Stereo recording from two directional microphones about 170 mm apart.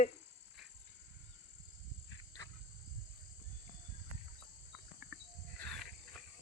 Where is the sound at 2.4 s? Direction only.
15° left (ahead or behind).